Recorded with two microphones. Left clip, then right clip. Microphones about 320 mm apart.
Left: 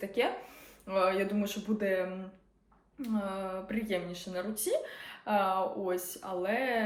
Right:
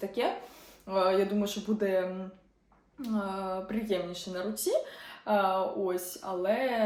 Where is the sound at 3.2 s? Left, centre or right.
Centre.